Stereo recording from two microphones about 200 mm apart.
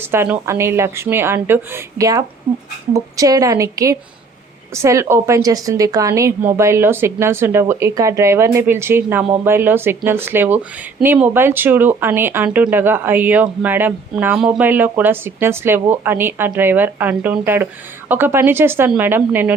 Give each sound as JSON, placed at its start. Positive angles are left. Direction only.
{"t": 0.1, "sound": "speech", "side_deg": -10}